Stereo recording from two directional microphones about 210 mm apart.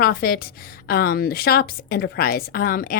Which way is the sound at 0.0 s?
45° left (ahead or behind).